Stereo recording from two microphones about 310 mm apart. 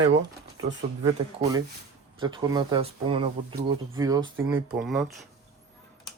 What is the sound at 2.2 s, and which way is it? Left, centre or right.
Speech, centre.